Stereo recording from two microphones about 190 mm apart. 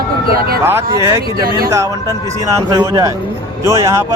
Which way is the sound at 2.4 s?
15° right (ahead or behind).